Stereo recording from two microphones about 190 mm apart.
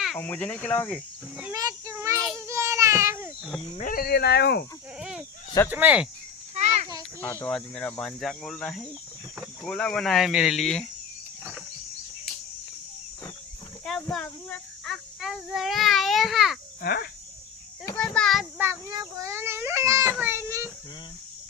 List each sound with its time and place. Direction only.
0.2 s speech: 10° left (ahead or behind)
1.5 s child singing: 15° right (ahead or behind)
2.5 s babbling: 15° right (ahead or behind)
3.8 s speech: 45° left (ahead or behind)
4.9 s a sound: 5° right (ahead or behind)
5.6 s speech: 10° right (ahead or behind)
6.5 s a sound: 35° right (ahead or behind)
7.2 s speech: 10° left (ahead or behind)
13.8 s child singing: centre (ahead or behind)
16.8 s speech: 55° left (ahead or behind)
17.8 s child singing: 5° left (ahead or behind)
18.6 s child singing: 15° right (ahead or behind)